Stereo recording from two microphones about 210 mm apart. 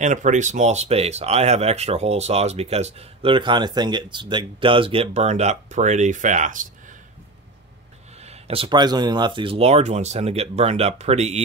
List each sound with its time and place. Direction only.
0.0 s speech: 35° right (ahead or behind)
8.2 s speech: 30° right (ahead or behind)